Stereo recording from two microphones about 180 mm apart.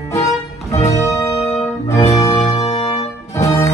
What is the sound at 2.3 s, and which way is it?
Music, 35° left (ahead or behind).